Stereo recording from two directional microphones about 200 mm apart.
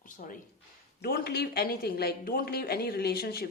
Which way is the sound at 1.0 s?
55° left (ahead or behind).